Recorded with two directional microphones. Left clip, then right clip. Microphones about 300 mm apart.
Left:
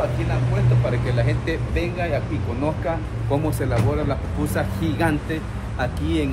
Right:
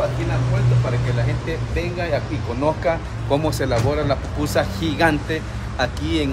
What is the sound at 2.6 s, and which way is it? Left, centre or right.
Speech, right.